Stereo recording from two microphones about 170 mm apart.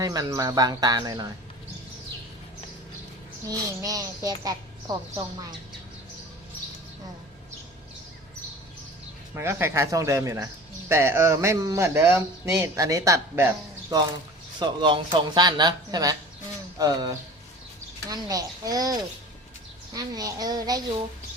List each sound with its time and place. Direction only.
0.0 s a child's voice: 20° right (ahead or behind)
3.8 s a child's voice: 20° right (ahead or behind)
9.3 s speech: 15° right (ahead or behind)
14.6 s a child's voice: 25° right (ahead or behind)